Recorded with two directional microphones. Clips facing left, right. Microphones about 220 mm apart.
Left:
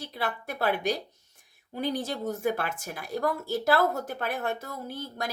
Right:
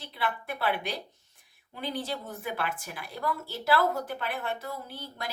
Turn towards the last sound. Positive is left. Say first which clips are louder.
# left 5 dB
turn(degrees=45)  # may be behind; listen again after turning